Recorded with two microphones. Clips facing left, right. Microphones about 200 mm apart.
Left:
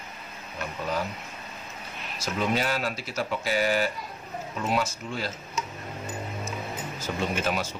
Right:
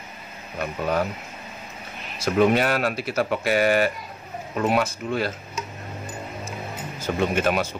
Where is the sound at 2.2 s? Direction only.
60° right (ahead or behind).